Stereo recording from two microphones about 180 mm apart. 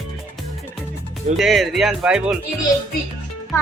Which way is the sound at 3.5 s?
15° left (ahead or behind).